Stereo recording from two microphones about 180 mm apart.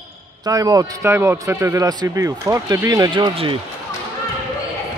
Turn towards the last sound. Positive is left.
turn(degrees=-30)  # may be behind; listen again after turning